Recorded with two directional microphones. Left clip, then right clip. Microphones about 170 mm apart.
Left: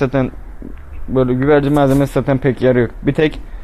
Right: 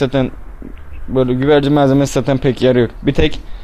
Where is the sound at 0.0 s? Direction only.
20° right (ahead or behind).